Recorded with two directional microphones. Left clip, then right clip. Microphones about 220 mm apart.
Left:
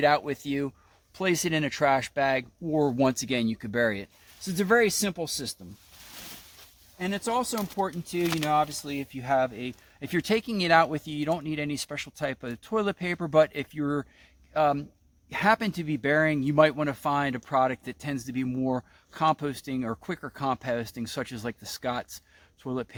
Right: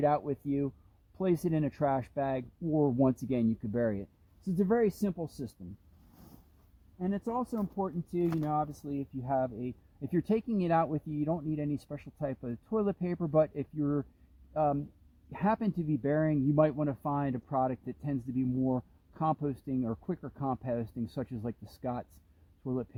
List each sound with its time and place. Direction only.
0.0 s speech: 10° left (ahead or behind)
7.0 s speech: 20° left (ahead or behind)